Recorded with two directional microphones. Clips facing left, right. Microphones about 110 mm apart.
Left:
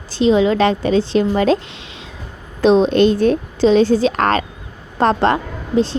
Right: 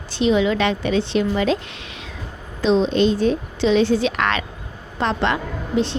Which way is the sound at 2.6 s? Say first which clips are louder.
Left 5 dB; 55° left (ahead or behind).